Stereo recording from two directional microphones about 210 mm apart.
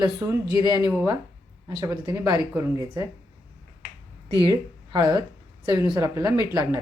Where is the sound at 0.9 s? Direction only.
5° right (ahead or behind).